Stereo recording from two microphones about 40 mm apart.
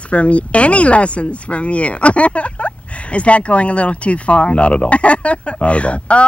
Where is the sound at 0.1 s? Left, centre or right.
Left.